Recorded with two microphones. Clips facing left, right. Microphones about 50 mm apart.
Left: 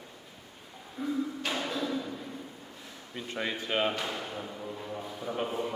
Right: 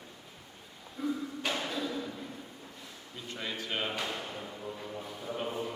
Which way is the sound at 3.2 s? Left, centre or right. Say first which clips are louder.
Left 5 dB; left.